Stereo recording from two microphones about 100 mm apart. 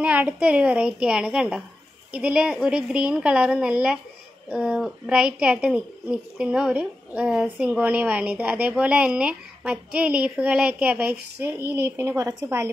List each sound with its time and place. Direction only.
0.0 s a woman's voice: 15° right (ahead or behind)